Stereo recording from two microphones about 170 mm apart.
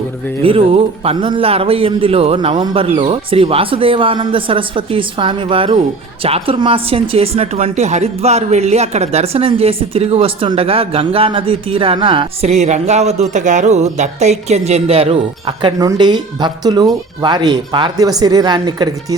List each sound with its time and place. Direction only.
0.4 s a woman's voice: 35° right (ahead or behind)